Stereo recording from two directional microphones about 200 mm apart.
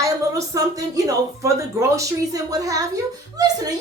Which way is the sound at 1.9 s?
15° right (ahead or behind).